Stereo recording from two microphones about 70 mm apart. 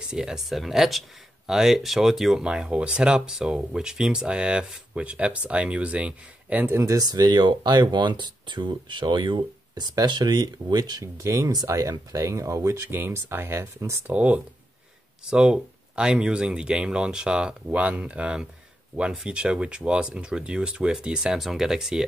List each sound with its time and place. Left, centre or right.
0.1 s speech: centre; by 6.9 s right
6.9 s speech: right
11.1 s speech: right
12.9 s speech: right
14.0 s speech: centre